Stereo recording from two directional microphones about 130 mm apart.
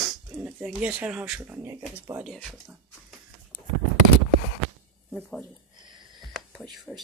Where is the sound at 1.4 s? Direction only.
20° right (ahead or behind).